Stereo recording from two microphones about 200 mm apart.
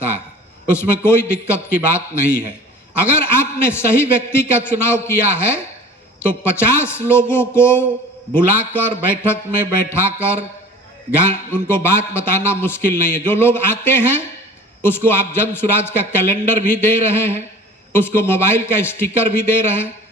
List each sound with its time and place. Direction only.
0.7 s a man's voice: 10° left (ahead or behind)
11.3 s a man's voice: 10° left (ahead or behind)